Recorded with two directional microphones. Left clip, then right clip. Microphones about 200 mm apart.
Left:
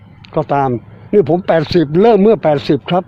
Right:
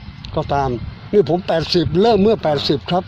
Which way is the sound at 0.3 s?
45° left (ahead or behind).